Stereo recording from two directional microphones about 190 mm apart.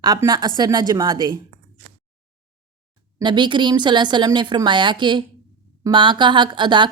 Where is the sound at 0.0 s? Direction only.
20° right (ahead or behind).